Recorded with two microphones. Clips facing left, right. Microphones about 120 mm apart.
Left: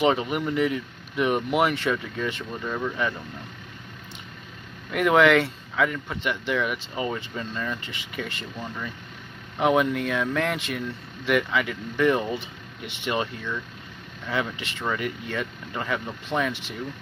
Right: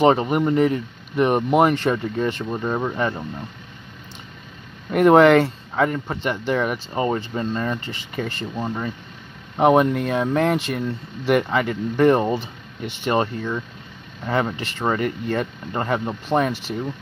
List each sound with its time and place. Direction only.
0.0 s speech: 40° right (ahead or behind)
4.9 s speech: 40° right (ahead or behind)